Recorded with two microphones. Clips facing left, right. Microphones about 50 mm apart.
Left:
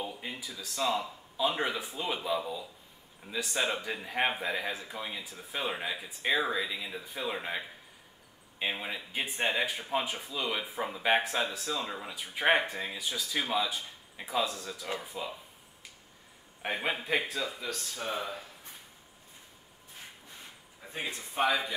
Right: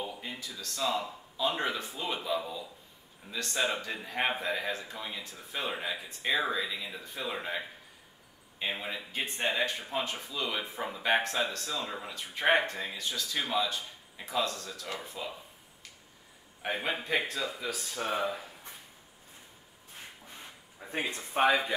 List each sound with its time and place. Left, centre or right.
0.0 s speech: centre
16.6 s speech: centre
18.0 s speech: centre
20.9 s speech: right